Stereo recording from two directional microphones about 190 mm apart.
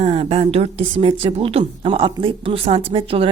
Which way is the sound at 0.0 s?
30° right (ahead or behind).